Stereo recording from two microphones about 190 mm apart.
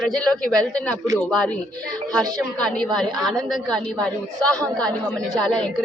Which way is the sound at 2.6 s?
5° left (ahead or behind).